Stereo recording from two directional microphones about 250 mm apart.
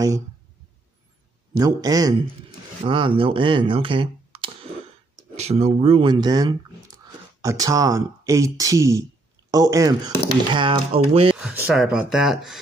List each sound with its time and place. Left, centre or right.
1.5 s speech: centre
11.3 s speech: centre